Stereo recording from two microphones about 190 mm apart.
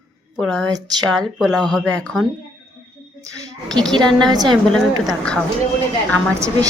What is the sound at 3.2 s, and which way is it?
Speech, 15° right (ahead or behind).